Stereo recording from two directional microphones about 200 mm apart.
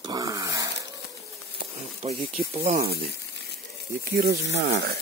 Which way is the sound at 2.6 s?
45° right (ahead or behind).